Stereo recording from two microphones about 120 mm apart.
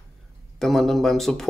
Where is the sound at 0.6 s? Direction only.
Centre (ahead or behind).